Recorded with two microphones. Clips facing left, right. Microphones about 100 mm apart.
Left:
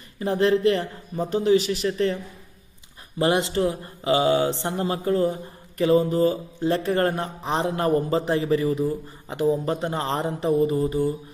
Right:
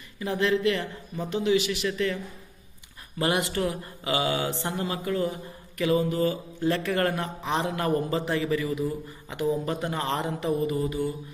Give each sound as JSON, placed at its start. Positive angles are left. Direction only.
{"t": 0.2, "sound": "a man's voice", "side_deg": 35}
{"t": 3.2, "sound": "a man's voice", "side_deg": 25}